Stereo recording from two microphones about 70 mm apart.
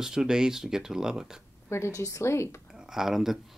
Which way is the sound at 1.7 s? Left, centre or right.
Left.